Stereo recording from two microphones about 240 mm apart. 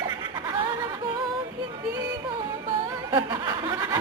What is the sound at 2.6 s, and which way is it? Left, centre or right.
Music, centre.